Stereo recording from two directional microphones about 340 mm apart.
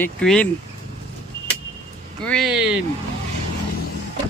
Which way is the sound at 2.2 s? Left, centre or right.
Centre.